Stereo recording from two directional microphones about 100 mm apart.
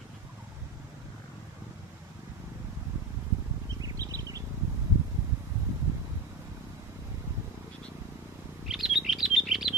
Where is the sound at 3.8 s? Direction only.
35° right (ahead or behind).